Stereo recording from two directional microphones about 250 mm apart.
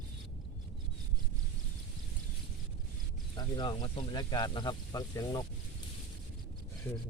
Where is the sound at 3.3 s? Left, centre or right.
Centre.